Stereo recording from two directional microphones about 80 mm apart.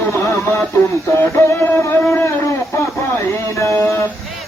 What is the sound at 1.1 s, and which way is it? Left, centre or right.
Music, left.